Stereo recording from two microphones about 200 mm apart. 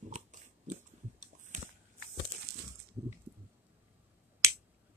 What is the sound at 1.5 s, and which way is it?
Shuffling cards, 40° right (ahead or behind).